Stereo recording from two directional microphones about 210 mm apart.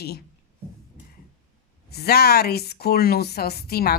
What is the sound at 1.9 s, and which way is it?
A woman's voice, 50° left (ahead or behind).